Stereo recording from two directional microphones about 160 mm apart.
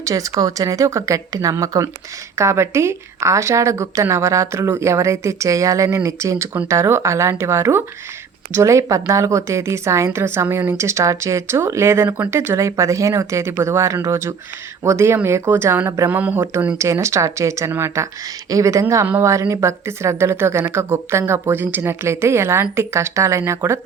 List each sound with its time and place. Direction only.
0.0 s a woman's voice: 20° right (ahead or behind)